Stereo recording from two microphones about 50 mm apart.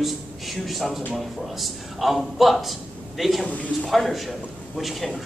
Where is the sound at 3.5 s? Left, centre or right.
Left.